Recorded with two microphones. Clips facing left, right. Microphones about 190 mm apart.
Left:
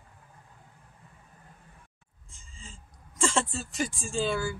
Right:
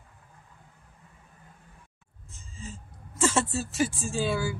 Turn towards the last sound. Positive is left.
turn(degrees=-5)  # may be behind; listen again after turning